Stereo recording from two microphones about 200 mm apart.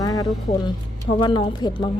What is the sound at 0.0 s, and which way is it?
A woman's voice, 20° left (ahead or behind).